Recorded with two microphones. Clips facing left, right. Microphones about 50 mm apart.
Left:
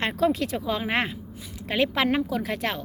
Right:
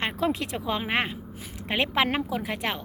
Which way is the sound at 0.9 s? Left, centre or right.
Centre.